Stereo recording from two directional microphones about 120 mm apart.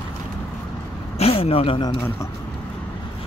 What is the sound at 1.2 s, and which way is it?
Speech, 55° left (ahead or behind).